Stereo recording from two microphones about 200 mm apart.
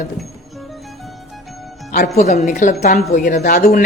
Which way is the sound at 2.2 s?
40° left (ahead or behind).